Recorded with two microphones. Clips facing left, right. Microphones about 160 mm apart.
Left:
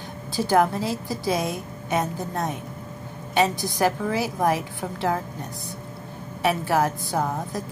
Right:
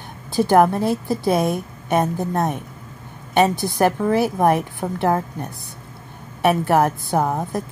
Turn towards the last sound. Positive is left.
turn(degrees=-55)  # may be behind; listen again after turning